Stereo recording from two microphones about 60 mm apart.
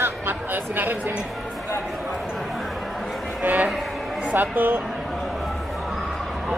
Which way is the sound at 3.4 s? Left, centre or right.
Right.